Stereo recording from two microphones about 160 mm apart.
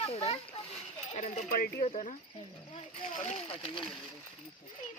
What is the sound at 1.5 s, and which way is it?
Speech, 65° left (ahead or behind).